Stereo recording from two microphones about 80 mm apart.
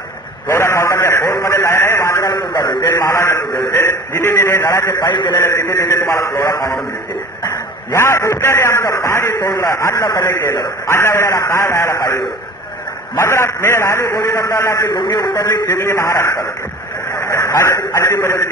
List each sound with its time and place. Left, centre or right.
0.5 s a sound: left
2.2 s a sound: left
2.8 s a man's voice: left
4.9 s a man's voice: left
5.4 s a man's voice: left
7.9 s a man's voice: left
14.9 s a man's voice: left
15.8 s a man's voice: left
17.1 s a sound: left
17.5 s a man's voice: left